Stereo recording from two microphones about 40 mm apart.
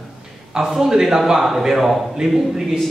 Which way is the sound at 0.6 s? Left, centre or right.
Centre.